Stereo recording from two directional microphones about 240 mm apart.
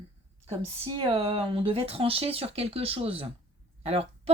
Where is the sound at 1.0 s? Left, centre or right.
Right.